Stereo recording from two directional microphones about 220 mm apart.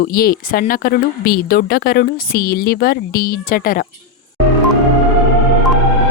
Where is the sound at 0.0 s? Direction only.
40° left (ahead or behind).